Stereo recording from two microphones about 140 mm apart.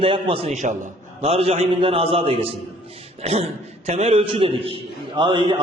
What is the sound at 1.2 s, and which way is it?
A man's voice, 45° right (ahead or behind).